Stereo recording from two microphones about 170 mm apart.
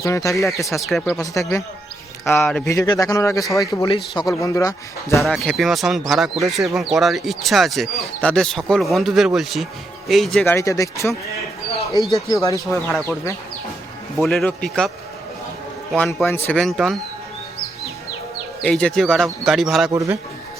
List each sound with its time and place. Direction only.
0.0 s a man's voice: 20° left (ahead or behind)
0.9 s speech: centre (ahead or behind)
1.2 s a man's voice: 20° left (ahead or behind)
2.6 s a man's voice: 20° left (ahead or behind)
5.2 s speech: centre (ahead or behind)
10.4 s a man's voice: 15° left (ahead or behind)
12.3 s a man's voice: 20° left (ahead or behind)
12.6 s speech: centre (ahead or behind)
14.2 s speech: 5° left (ahead or behind)
16.2 s a man's voice: 15° left (ahead or behind)
16.6 s speech: centre (ahead or behind)
18.6 s speech: 5° left (ahead or behind)
19.9 s a man's voice: 20° right (ahead or behind)